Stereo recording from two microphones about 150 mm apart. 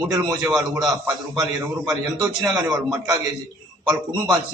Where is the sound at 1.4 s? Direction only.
20° right (ahead or behind).